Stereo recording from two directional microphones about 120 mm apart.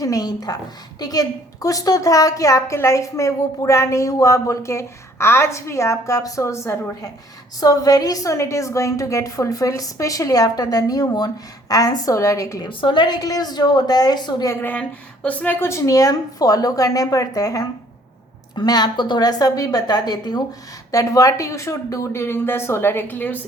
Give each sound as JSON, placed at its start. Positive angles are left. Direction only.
{"t": 0.0, "sound": "a woman's voice", "side_deg": 30}
{"t": 12.6, "sound": "a woman's voice", "side_deg": 40}
{"t": 14.6, "sound": "a woman's voice", "side_deg": 10}